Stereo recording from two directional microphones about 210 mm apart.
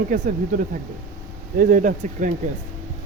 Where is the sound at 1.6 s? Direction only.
40° right (ahead or behind).